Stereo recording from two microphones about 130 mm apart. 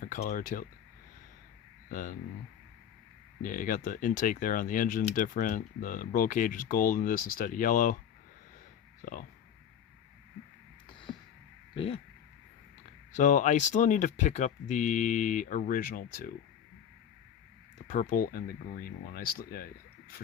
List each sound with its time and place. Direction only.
0.0 s speech: 90° left
1.9 s speech: 90° left
3.4 s speech: 90° left
9.0 s speech: 90° left
11.7 s a sound: 45° left (ahead or behind)
13.1 s speech: 70° left (ahead or behind); by 16.3 s 90° left
17.8 s speech: 85° left